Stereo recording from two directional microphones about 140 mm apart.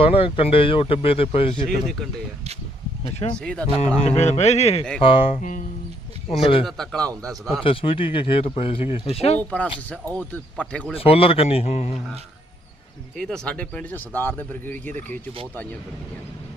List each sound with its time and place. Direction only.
0.0 s speech: 40° left (ahead or behind)
3.0 s speech: 40° left (ahead or behind)
3.3 s speech: 5° left (ahead or behind)
4.0 s speech: 50° left (ahead or behind)
5.4 s speech: 65° left (ahead or behind)
6.4 s speech: 40° left (ahead or behind)
6.7 s a man's voice: 5° left (ahead or behind)
7.6 s speech: 40° left (ahead or behind)
9.4 s speech: 10° left (ahead or behind)
10.9 s speech: 45° left (ahead or behind)
13.1 s speech: 5° left (ahead or behind)